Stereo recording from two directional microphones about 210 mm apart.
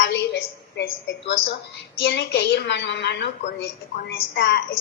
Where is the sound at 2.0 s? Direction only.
60° left (ahead or behind).